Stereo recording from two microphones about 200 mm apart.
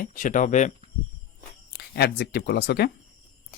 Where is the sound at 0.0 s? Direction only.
40° left (ahead or behind).